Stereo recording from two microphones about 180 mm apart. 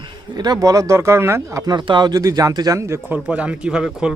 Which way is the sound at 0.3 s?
20° right (ahead or behind).